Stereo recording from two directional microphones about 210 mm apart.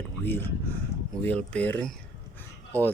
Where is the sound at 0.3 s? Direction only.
10° left (ahead or behind).